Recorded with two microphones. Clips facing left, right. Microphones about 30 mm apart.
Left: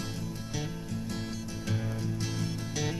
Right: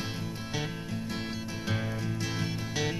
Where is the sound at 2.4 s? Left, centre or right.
Right.